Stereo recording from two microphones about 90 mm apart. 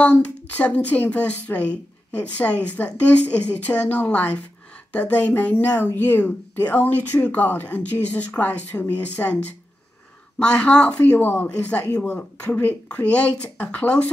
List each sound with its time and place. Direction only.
0.0 s a woman's voice: 15° left (ahead or behind)
10.4 s a woman's voice: 10° left (ahead or behind)